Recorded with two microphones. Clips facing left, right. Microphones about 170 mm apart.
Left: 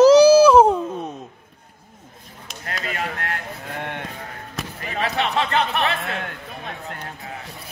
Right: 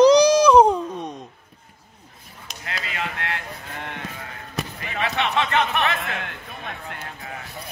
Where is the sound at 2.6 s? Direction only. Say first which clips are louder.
Left 2 dB; 45° left (ahead or behind).